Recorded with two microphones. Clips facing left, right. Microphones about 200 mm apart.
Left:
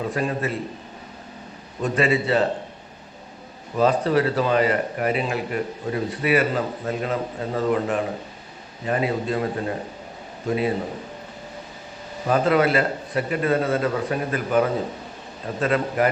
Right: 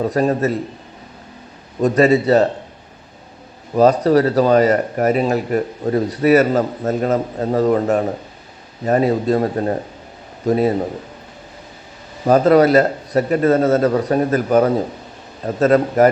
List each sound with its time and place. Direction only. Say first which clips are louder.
0.0 s speech: right 8 dB; 40° right (ahead or behind)
1.8 s speech: right 8 dB; 40° right (ahead or behind)
3.8 s speech: right 7 dB; 40° right (ahead or behind)
12.2 s speech: right 7 dB; 40° right (ahead or behind)